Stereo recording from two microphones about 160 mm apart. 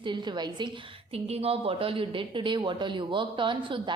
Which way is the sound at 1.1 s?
40° right (ahead or behind).